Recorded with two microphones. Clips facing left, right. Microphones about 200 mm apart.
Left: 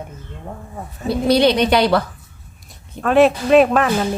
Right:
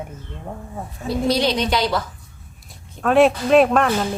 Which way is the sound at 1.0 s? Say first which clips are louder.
Left 5 dB; 65° left (ahead or behind).